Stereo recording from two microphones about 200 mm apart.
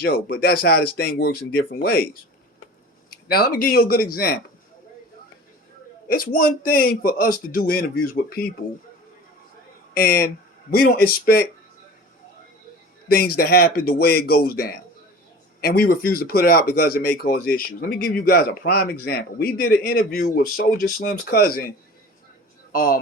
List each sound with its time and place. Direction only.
0.0 s speech: 50° left (ahead or behind)
3.2 s speech: 50° left (ahead or behind)
6.1 s speech: 45° left (ahead or behind)
9.9 s speech: 50° left (ahead or behind)
13.1 s speech: 50° left (ahead or behind)
22.7 s speech: 45° left (ahead or behind)